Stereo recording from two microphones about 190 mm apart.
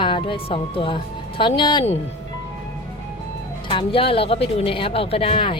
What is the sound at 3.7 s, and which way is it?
Speech, 30° left (ahead or behind).